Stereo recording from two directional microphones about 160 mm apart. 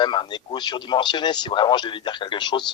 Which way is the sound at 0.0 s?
30° left (ahead or behind).